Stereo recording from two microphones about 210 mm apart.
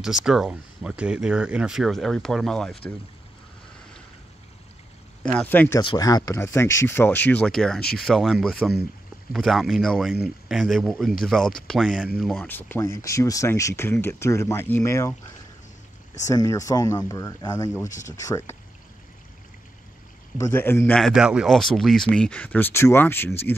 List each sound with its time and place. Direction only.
0.0 s speech: centre (ahead or behind)
5.2 s speech: 5° left (ahead or behind)
16.3 s speech: 15° left (ahead or behind)
20.3 s speech: 10° left (ahead or behind)